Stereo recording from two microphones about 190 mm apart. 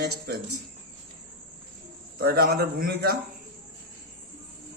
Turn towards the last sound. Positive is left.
turn(degrees=-55)  # may be behind; listen again after turning